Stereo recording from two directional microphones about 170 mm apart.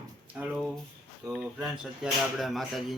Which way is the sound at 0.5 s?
Centre (ahead or behind).